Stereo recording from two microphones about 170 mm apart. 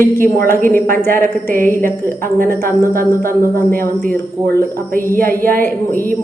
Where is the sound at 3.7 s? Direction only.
55° right (ahead or behind).